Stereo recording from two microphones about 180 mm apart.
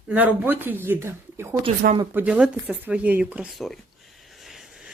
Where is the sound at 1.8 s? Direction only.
55° right (ahead or behind).